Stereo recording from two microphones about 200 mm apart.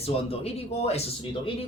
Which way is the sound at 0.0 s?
30° left (ahead or behind).